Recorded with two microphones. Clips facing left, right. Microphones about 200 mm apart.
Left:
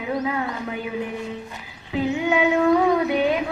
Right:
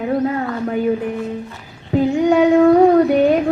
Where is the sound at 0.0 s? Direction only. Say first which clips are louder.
Right 6 dB; 45° right (ahead or behind).